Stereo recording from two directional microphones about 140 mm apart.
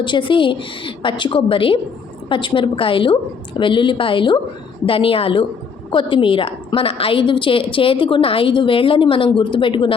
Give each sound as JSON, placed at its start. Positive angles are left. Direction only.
{"t": 0.0, "sound": "a woman's voice", "side_deg": 35}